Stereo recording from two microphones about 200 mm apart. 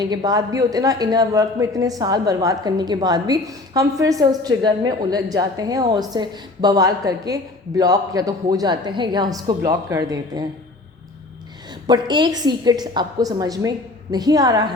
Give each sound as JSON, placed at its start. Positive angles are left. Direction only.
{"t": 0.0, "sound": "speech", "side_deg": -20}
{"t": 11.9, "sound": "speech", "side_deg": -20}